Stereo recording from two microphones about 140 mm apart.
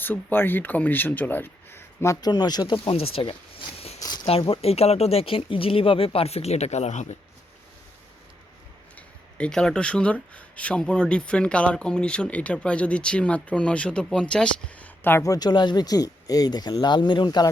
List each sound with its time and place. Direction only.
0.0 s speech: 15° left (ahead or behind)
2.2 s speech: 30° left (ahead or behind)
2.8 s speech: 40° left (ahead or behind)
9.0 s speech: 5° left (ahead or behind); by 17.5 s 30° left (ahead or behind)